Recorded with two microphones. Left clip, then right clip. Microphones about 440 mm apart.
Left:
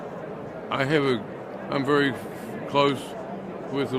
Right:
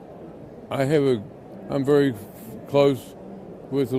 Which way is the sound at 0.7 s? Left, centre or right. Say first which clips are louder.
Right 2 dB; right.